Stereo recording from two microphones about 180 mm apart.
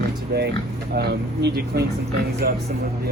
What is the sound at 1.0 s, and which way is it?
Speech, 65° right (ahead or behind).